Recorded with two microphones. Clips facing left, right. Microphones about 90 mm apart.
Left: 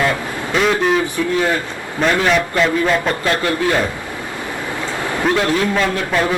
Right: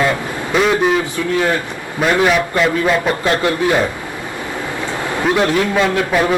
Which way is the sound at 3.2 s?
20° right (ahead or behind).